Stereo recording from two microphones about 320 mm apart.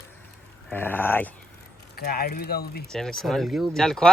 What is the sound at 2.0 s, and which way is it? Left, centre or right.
Speech, left.